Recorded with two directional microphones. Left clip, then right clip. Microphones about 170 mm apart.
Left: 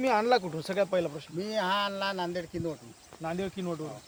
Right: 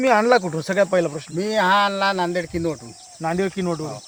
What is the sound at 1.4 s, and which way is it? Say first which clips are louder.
Speech: right 12 dB; centre (ahead or behind).